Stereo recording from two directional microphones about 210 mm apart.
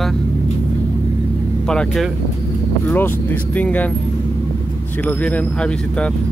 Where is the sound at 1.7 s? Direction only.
Centre (ahead or behind).